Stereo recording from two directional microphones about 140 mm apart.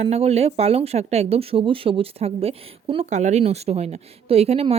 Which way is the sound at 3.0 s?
55° right (ahead or behind).